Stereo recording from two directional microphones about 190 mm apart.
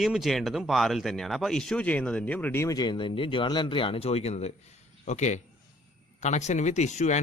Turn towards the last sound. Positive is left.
turn(degrees=40)  # may be behind; listen again after turning